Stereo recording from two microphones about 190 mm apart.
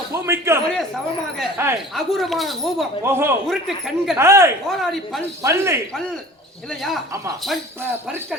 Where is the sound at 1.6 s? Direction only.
15° right (ahead or behind).